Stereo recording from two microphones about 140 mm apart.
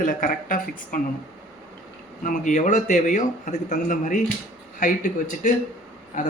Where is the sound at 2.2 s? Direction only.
65° left (ahead or behind).